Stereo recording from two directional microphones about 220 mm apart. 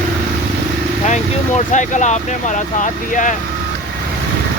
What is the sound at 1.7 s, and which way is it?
Vehicle, 35° left (ahead or behind).